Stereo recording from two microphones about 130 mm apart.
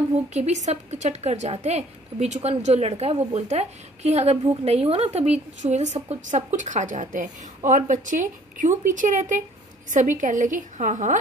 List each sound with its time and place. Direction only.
0.3 s speech: 60° right (ahead or behind)
5.6 s a woman's voice: 65° right (ahead or behind)